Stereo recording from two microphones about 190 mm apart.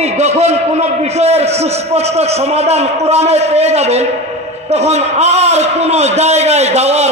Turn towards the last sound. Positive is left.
turn(degrees=-35)  # may be behind; listen again after turning